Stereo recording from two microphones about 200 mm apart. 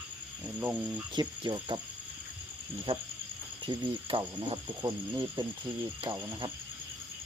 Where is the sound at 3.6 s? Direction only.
25° right (ahead or behind).